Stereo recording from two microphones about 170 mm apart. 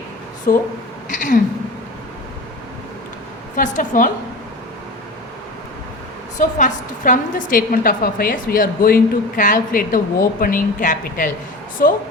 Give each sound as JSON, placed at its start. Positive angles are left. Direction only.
{"t": 0.5, "sound": "a woman's voice", "side_deg": 55}
{"t": 3.5, "sound": "a woman's voice", "side_deg": 50}
{"t": 6.6, "sound": "a woman's voice", "side_deg": 50}